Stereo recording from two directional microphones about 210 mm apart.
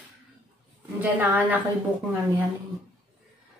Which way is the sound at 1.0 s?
10° right (ahead or behind).